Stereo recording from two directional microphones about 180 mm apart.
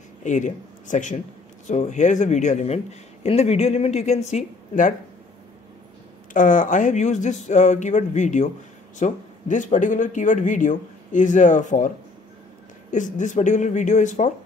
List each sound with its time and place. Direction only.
0.2 s speech: 45° left (ahead or behind)
6.3 s speech: 45° left (ahead or behind)
12.9 s speech: 45° left (ahead or behind)